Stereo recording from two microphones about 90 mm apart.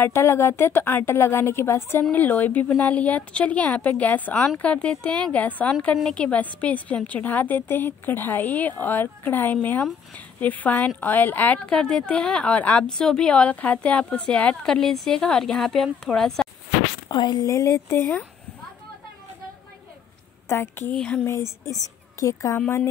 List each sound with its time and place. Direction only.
0.0 s a woman's voice: 30° left (ahead or behind); by 16.4 s 5° left (ahead or behind)
17.1 s speech: 50° left (ahead or behind)
17.5 s a woman's voice: 35° left (ahead or behind)
20.4 s speech: 25° left (ahead or behind)
20.9 s speech: 15° left (ahead or behind)
21.3 s a woman's voice: 35° left (ahead or behind)